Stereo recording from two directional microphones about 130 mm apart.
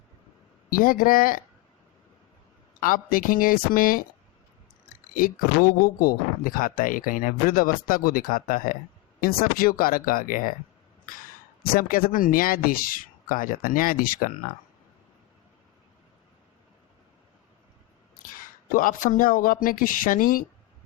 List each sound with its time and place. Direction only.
0.7 s speech: 90° left
2.8 s speech: 90° left
5.1 s speech: 90° left
11.8 s speech: 90° left
18.7 s speech: 90° left